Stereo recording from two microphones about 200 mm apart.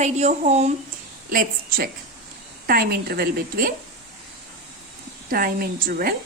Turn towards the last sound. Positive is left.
turn(degrees=-50)  # may be behind; listen again after turning